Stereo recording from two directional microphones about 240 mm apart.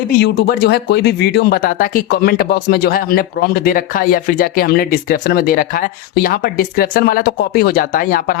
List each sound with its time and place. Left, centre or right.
0.2 s speech: left